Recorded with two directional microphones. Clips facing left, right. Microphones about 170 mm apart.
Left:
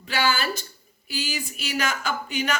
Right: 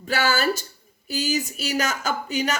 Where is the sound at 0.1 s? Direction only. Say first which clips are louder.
Right 3 dB; 40° right (ahead or behind).